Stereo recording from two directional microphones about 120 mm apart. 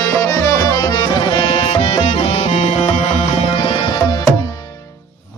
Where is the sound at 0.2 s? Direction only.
25° left (ahead or behind).